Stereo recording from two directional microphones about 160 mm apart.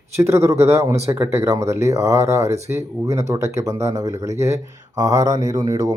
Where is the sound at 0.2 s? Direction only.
15° right (ahead or behind).